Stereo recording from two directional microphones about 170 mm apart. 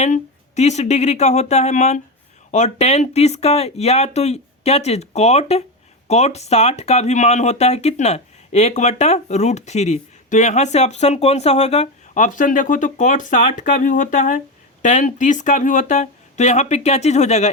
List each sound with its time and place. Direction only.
0.0 s speech: 40° left (ahead or behind)